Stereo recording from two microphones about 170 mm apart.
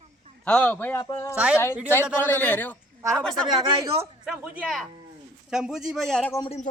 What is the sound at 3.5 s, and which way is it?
Speech, 30° right (ahead or behind).